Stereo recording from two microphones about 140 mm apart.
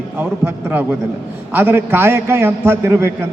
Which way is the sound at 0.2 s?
15° right (ahead or behind).